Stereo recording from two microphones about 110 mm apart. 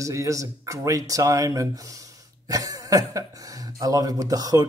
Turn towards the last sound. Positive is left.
turn(degrees=-35)  # may be behind; listen again after turning